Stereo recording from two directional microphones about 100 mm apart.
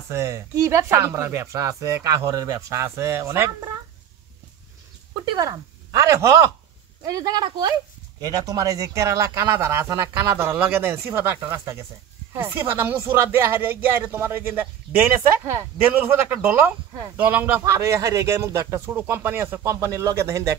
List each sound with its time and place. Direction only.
0.1 s speech: 30° right (ahead or behind)
5.1 s a sound: 45° right (ahead or behind)
5.5 s speech: 35° right (ahead or behind)
9.8 s speech: 35° right (ahead or behind)
10.1 s speech: 25° right (ahead or behind)
15.9 s a man's voice: 15° right (ahead or behind)
17.6 s speech: 30° right (ahead or behind)